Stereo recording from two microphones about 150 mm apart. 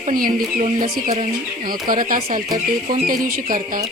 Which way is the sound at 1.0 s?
45° right (ahead or behind).